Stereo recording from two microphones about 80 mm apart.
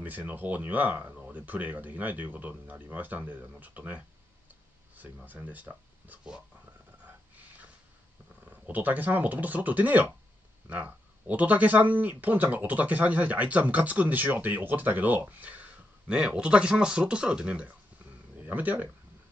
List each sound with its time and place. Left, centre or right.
0.0 s speech: right
5.3 s speech: right
7.1 s snort: centre
8.5 s speech: centre